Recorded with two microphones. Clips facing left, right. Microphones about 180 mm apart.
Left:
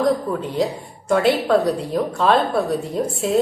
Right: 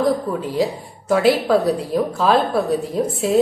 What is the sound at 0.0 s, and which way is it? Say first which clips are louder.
A woman's voice: even; 5° right (ahead or behind).